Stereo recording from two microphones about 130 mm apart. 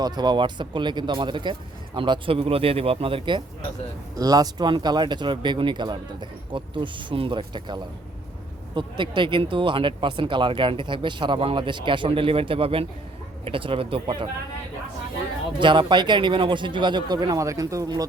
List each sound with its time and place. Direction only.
0.0 s speech: 30° right (ahead or behind)
4.2 s speech: 30° right (ahead or behind)
15.5 s speech: 40° right (ahead or behind)